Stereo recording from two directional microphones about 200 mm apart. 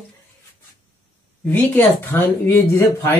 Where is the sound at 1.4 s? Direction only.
10° left (ahead or behind).